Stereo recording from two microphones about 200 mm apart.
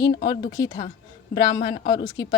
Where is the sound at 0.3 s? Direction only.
20° left (ahead or behind).